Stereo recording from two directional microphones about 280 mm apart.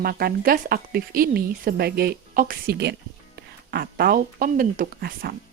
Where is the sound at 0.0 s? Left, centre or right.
Right.